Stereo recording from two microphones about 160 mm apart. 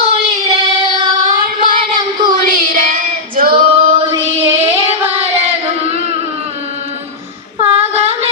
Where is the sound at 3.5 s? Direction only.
35° right (ahead or behind).